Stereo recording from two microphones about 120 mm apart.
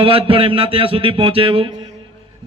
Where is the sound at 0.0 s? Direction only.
50° right (ahead or behind).